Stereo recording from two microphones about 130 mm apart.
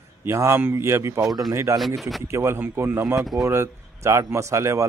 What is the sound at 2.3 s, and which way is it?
A man's voice, 20° right (ahead or behind).